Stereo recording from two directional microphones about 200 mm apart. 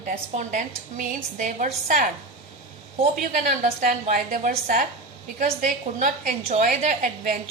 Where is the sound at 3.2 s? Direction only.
40° right (ahead or behind).